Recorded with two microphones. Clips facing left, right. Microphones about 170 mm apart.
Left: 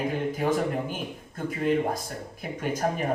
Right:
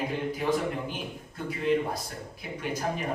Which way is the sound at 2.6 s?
45° left (ahead or behind).